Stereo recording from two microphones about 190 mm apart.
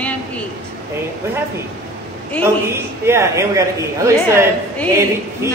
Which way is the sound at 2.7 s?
15° right (ahead or behind).